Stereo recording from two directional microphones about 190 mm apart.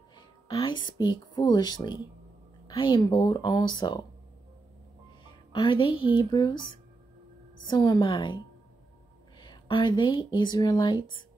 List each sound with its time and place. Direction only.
0.5 s speech: 20° left (ahead or behind)
5.5 s speech: 25° left (ahead or behind)
7.6 s speech: 20° left (ahead or behind)
9.4 s speech: 20° left (ahead or behind)